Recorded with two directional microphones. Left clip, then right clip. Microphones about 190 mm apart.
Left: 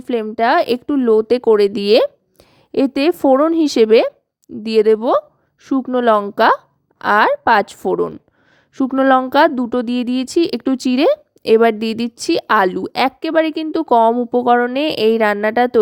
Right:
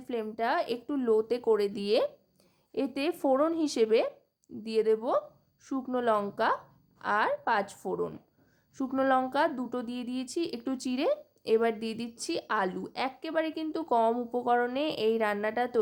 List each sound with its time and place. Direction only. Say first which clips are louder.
0.0 s speech: left 15 dB; 45° left (ahead or behind)